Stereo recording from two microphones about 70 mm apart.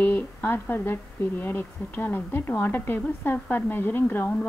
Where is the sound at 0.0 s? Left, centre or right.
Left.